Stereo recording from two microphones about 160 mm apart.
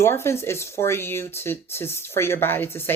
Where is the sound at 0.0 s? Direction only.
15° left (ahead or behind).